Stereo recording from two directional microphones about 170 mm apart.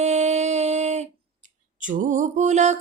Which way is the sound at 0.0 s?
40° right (ahead or behind).